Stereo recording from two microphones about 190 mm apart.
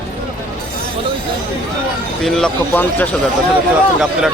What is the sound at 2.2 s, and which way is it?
Speech, 5° left (ahead or behind).